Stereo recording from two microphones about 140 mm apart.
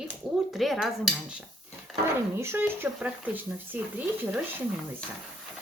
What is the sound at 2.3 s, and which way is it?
Speech, 15° right (ahead or behind).